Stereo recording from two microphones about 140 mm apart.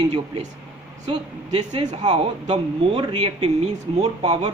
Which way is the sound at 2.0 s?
35° right (ahead or behind).